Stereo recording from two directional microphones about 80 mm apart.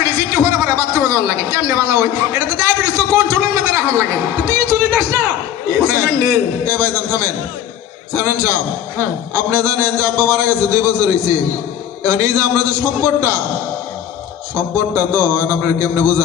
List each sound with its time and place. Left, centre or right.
0.0 s a sound: right
5.7 s a man's voice: right
14.5 s a man's voice: right